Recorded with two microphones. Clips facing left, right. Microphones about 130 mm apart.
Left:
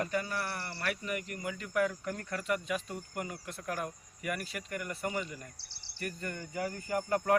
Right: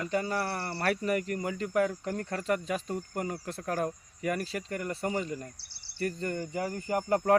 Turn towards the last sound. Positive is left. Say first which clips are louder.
# right 4 dB
turn(degrees=-35)  # may be behind; listen again after turning